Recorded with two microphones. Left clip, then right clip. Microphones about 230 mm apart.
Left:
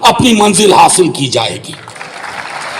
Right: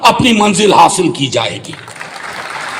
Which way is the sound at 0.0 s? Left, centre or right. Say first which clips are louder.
Left 1 dB; left.